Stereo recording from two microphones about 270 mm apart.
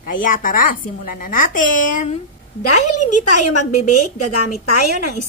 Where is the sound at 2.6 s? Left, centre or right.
Left.